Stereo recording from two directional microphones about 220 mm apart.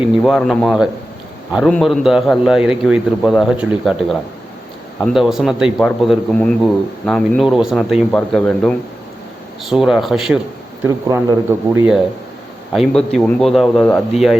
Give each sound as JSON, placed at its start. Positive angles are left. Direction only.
{"t": 0.2, "sound": "a man's voice", "side_deg": 0}
{"t": 10.8, "sound": "speech", "side_deg": -15}
{"t": 12.7, "sound": "a man's voice", "side_deg": 0}